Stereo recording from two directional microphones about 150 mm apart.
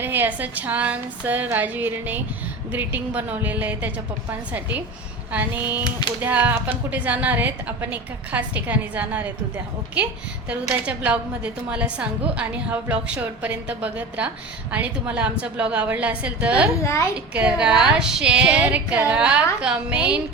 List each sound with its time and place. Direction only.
0.0 s a woman's voice: 15° right (ahead or behind)
10.5 s a woman's voice: 10° right (ahead or behind)
16.8 s a woman's voice: 20° left (ahead or behind)
17.3 s a woman's voice: 5° right (ahead or behind)